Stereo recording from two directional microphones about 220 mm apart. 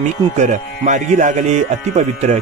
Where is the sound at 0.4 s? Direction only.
35° right (ahead or behind).